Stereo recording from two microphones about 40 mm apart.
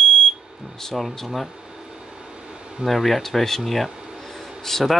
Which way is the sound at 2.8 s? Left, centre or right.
Centre.